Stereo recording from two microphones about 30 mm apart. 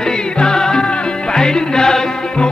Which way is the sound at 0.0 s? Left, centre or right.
Left.